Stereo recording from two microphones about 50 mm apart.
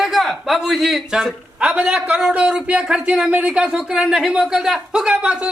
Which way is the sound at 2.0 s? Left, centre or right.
Right.